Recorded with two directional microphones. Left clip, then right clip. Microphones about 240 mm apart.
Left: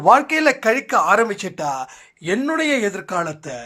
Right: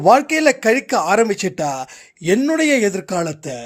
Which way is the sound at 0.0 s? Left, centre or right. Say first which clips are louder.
Right 1 dB; right.